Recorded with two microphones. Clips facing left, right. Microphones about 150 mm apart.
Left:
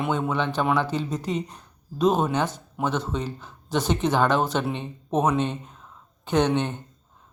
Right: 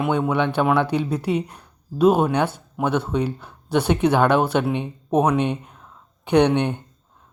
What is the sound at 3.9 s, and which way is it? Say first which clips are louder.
A man's voice: right 4 dB; 10° right (ahead or behind).